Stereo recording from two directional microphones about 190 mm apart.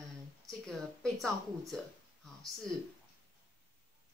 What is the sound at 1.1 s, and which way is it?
Speech, 15° right (ahead or behind).